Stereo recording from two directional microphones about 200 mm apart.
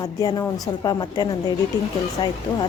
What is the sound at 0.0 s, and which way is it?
A woman's voice, 20° left (ahead or behind).